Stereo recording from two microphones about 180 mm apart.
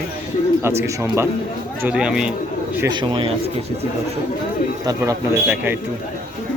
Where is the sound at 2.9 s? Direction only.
25° right (ahead or behind).